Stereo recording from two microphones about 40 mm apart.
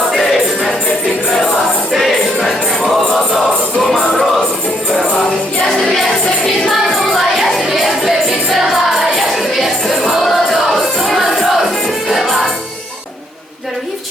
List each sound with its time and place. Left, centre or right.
0.1 s music: centre
5.9 s music: centre